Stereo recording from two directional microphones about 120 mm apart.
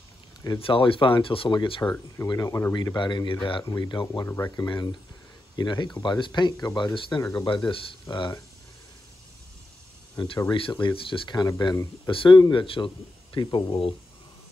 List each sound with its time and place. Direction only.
0.6 s speech: 50° left (ahead or behind)
2.2 s speech: 30° left (ahead or behind); by 8.3 s 45° left (ahead or behind)
10.1 s speech: 45° left (ahead or behind); by 11.9 s 25° left (ahead or behind)
12.1 s speech: 45° left (ahead or behind)